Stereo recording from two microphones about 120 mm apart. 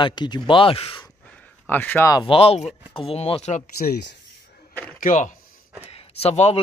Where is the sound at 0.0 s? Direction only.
40° left (ahead or behind).